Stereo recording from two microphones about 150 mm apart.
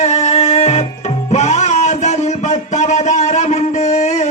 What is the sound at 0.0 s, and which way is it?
Music, 50° left (ahead or behind).